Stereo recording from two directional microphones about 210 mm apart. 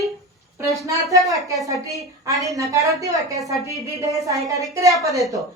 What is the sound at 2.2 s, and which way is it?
A woman's voice, 15° right (ahead or behind).